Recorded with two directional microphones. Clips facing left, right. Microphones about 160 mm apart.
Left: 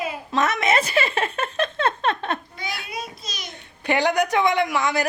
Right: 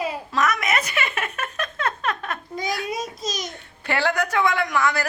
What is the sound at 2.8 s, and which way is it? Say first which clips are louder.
Speech: right 6 dB; 40° right (ahead or behind).